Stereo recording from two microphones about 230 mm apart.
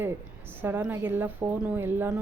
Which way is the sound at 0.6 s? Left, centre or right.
Centre.